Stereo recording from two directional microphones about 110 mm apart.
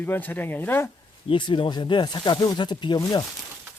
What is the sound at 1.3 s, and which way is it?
Speech, 45° left (ahead or behind).